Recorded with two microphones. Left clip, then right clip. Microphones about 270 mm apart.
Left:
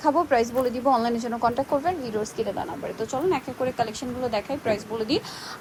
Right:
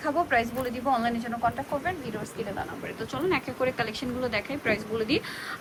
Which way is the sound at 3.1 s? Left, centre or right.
Centre.